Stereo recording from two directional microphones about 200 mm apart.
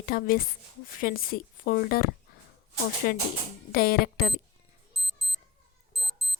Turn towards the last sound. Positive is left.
turn(degrees=0)  # may be behind; listen again after turning